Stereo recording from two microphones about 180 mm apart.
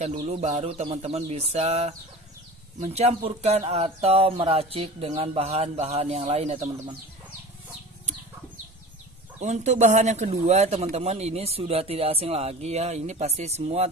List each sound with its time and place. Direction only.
0.1 s speech: 35° right (ahead or behind)
9.4 s speech: 40° right (ahead or behind)